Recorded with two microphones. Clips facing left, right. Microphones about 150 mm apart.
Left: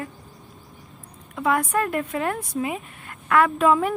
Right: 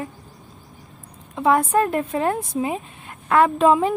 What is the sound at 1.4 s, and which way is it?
Speech, 25° right (ahead or behind).